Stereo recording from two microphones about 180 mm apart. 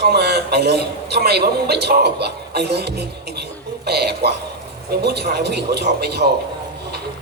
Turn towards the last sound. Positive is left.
turn(degrees=-65)  # may be behind; listen again after turning